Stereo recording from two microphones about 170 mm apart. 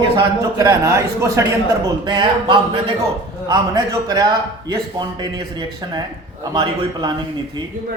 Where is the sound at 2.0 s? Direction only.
25° right (ahead or behind).